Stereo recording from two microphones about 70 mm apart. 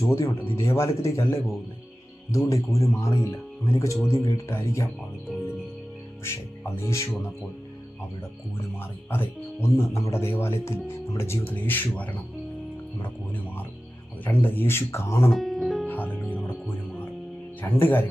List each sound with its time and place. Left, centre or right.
0.0 s speech: left
3.8 s speech: left
4.0 s speech: left
5.3 s music: centre
6.8 s speech: left
8.8 s speech: left
11.4 s a man's voice: left
15.3 s music: centre
15.9 s music: left
17.6 s a man's voice: left